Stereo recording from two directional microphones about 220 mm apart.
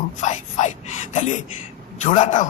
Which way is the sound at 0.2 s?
35° left (ahead or behind).